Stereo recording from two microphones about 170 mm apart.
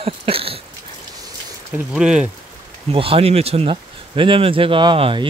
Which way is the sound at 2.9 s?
35° right (ahead or behind).